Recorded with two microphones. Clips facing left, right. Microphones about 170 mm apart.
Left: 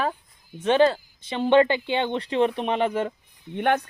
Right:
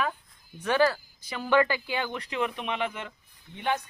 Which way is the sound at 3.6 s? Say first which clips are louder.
Left 7 dB; 60° left (ahead or behind).